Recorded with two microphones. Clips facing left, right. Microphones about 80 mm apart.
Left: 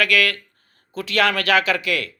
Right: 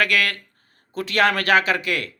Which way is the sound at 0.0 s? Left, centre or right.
Right.